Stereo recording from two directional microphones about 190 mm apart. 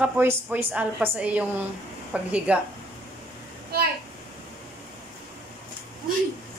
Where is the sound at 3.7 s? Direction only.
55° right (ahead or behind).